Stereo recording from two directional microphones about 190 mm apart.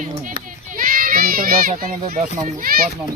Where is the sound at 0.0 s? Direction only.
40° right (ahead or behind).